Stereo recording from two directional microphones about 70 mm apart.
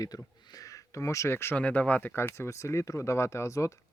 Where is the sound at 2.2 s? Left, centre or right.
Left.